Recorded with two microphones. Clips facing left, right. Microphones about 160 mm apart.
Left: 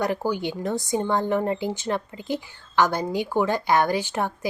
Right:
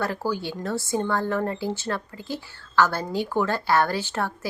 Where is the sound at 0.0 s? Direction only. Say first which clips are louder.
Left 2 dB; 15° left (ahead or behind).